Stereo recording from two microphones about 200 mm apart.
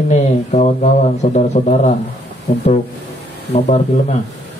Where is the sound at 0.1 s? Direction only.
35° left (ahead or behind).